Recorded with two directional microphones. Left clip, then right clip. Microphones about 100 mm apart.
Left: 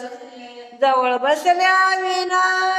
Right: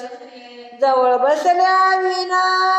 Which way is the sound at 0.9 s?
20° right (ahead or behind).